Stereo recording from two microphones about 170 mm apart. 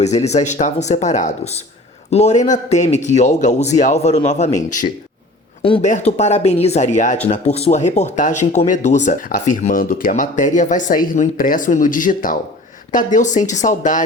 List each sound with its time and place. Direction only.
0.0 s speech: 40° left (ahead or behind)